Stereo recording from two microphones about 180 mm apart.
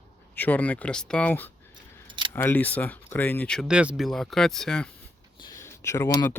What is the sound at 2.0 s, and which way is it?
Keys jangling, 25° right (ahead or behind).